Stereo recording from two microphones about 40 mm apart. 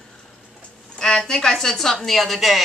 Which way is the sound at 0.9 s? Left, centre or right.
Centre.